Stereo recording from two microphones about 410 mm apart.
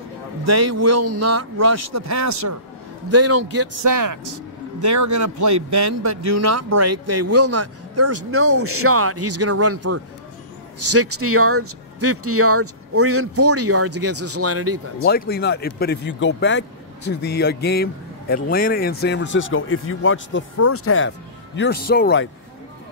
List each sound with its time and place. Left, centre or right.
0.5 s a man's voice: right
3.9 s a man's voice: right
15.0 s speech: left